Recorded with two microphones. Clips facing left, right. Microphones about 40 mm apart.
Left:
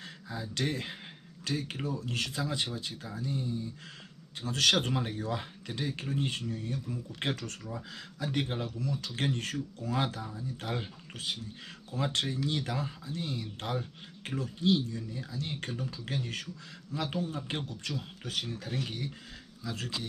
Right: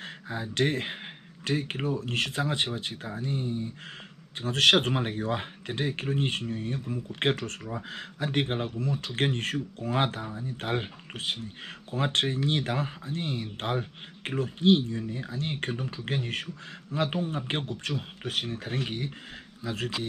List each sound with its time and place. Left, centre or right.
0.0 s speech: right